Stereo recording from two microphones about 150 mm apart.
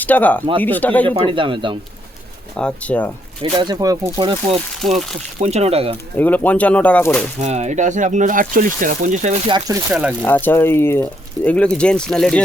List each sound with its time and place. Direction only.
0.0 s speech: 10° left (ahead or behind)
1.0 s speech: 35° right (ahead or behind)
2.6 s speech: 5° left (ahead or behind)
3.6 s speech: 25° right (ahead or behind)
4.8 s speech: 5° left (ahead or behind)
5.4 s speech: 45° right (ahead or behind)
6.1 s speech: 10° left (ahead or behind)
7.3 s speech: 45° right (ahead or behind)
9.9 s speech: 5° right (ahead or behind)
10.2 s speech: 15° left (ahead or behind)